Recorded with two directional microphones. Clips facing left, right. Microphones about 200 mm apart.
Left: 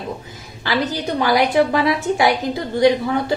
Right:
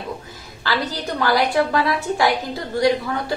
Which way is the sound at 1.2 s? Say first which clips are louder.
Left 2 dB; 20° left (ahead or behind).